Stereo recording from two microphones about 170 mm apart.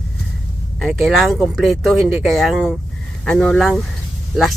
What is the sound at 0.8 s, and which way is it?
Speech, centre (ahead or behind).